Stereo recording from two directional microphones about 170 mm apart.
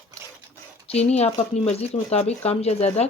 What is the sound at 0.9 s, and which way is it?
Speech, 40° left (ahead or behind).